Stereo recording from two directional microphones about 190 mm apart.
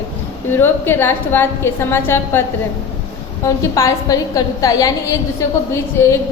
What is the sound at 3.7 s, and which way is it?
A woman's voice, 15° left (ahead or behind).